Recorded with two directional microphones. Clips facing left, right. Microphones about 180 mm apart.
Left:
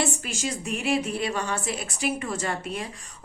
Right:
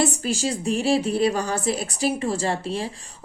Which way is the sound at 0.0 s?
35° right (ahead or behind).